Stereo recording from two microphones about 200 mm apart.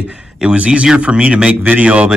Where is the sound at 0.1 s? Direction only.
5° right (ahead or behind).